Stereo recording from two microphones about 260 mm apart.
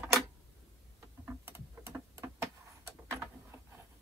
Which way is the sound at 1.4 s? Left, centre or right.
Centre.